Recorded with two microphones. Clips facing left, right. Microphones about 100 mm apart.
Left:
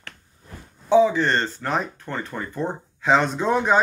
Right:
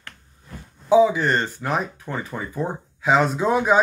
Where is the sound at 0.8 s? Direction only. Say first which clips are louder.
Right 1 dB; 10° right (ahead or behind).